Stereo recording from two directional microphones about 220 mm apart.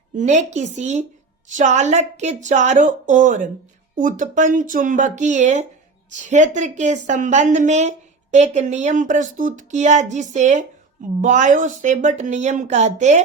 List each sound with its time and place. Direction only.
0.2 s a woman's voice: 35° right (ahead or behind)